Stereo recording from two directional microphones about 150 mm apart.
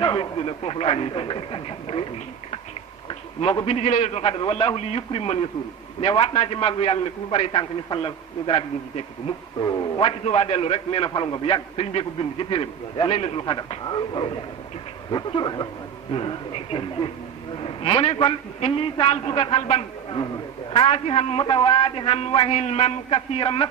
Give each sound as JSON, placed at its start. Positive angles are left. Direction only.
{"t": 0.0, "sound": "a man's voice", "side_deg": 30}
{"t": 3.1, "sound": "a sound", "side_deg": 35}
{"t": 3.6, "sound": "a man's voice", "side_deg": 45}
{"t": 9.6, "sound": "a man's voice", "side_deg": 25}
{"t": 9.9, "sound": "a man's voice", "side_deg": 40}